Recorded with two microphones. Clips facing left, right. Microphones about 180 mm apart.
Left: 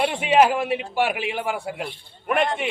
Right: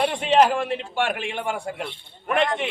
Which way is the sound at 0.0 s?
10° left (ahead or behind).